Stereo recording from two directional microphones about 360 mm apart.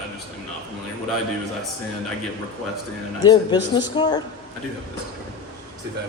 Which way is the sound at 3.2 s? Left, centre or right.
Centre.